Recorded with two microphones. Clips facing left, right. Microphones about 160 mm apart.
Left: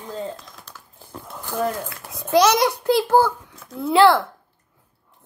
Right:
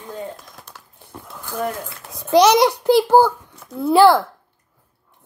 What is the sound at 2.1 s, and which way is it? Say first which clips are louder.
A child's voice: right 3 dB; centre (ahead or behind).